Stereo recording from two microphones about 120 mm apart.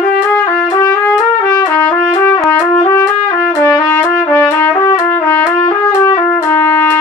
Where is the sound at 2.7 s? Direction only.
25° left (ahead or behind).